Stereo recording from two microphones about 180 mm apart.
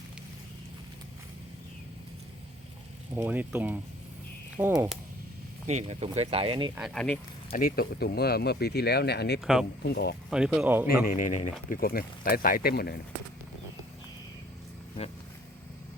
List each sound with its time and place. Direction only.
3.2 s speech: 10° right (ahead or behind)
5.6 s speech: 35° right (ahead or behind)
6.7 s speech: centre (ahead or behind)
7.5 s speech: 55° left (ahead or behind)
9.4 s speech: centre (ahead or behind)
9.8 s speech: 65° left (ahead or behind)
10.2 s speech: 5° right (ahead or behind)
11.0 s speech: 45° left (ahead or behind)
11.7 s speech: 55° left (ahead or behind)